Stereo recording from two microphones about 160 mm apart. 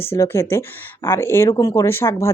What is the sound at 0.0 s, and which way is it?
Speech, 15° left (ahead or behind).